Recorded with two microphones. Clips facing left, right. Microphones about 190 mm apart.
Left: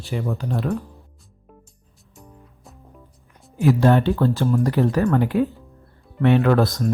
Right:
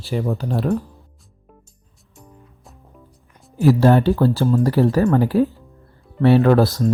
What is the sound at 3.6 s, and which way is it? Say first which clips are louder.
Speech: right 3 dB; 35° right (ahead or behind).